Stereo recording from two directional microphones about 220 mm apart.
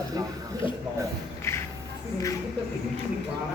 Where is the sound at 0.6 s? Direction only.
25° left (ahead or behind).